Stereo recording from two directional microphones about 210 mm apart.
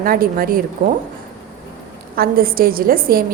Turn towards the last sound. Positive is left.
turn(degrees=-45)  # may be behind; listen again after turning